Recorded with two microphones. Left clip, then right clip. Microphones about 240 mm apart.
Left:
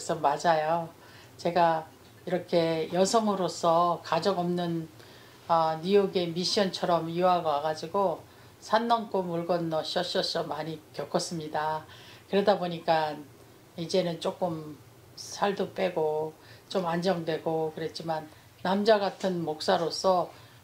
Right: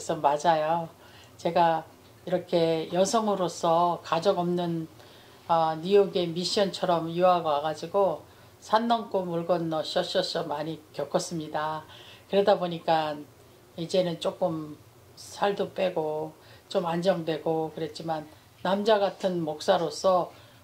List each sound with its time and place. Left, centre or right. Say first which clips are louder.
0.0 s speech: right 2 dB; right